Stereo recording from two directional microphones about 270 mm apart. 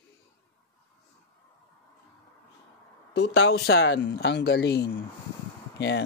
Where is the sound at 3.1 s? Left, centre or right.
Left.